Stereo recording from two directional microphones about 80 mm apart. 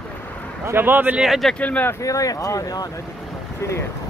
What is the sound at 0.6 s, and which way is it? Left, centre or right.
Speech, right.